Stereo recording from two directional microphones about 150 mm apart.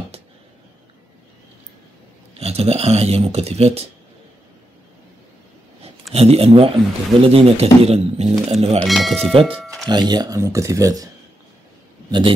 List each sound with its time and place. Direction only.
2.3 s speech: 45° right (ahead or behind)
6.1 s speech: 40° right (ahead or behind)
8.7 s speech: centre (ahead or behind)
9.2 s speech: 40° right (ahead or behind)
9.6 s music: centre (ahead or behind)
9.8 s speech: 30° right (ahead or behind)